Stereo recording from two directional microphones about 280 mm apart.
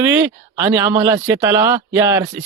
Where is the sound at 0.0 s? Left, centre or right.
Centre.